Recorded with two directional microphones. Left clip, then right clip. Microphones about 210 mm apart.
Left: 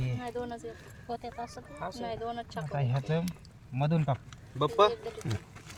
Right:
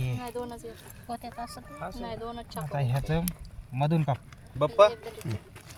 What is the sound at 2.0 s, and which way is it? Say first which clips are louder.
Speech: left 4 dB; 15° right (ahead or behind).